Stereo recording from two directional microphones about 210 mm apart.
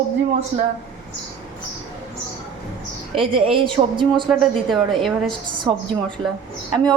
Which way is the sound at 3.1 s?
25° right (ahead or behind).